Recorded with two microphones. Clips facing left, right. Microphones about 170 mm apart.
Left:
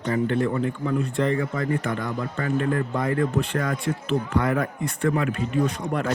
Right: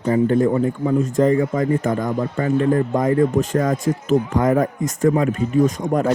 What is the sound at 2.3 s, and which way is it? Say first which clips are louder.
Speech: right 6 dB; 25° right (ahead or behind).